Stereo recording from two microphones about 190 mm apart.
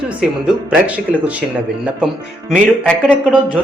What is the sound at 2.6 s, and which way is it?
Speech, 5° right (ahead or behind).